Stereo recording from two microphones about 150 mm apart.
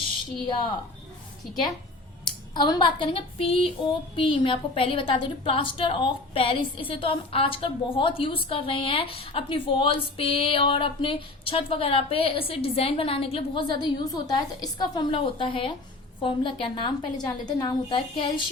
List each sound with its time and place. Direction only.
2.6 s a woman's voice: 30° left (ahead or behind)